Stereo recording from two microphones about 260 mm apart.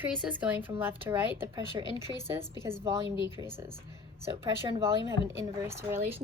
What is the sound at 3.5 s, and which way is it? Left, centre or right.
Speech, centre.